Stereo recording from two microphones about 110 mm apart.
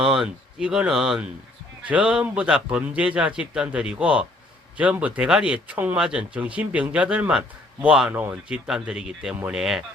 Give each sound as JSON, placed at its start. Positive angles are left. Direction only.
{"t": 0.0, "sound": "speech", "side_deg": -5}